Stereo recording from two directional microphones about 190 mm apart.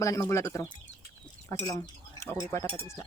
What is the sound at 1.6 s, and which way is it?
Cutlery, 15° left (ahead or behind).